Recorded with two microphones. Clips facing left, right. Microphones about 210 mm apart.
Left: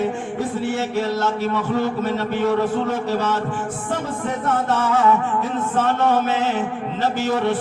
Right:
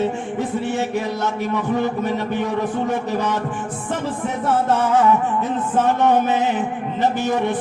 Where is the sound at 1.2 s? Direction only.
15° right (ahead or behind).